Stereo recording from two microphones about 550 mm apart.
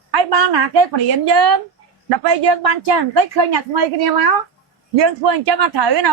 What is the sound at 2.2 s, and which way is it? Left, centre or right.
A woman's voice, right.